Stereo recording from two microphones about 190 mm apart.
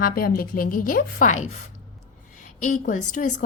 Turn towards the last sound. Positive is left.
turn(degrees=40)  # may be behind; listen again after turning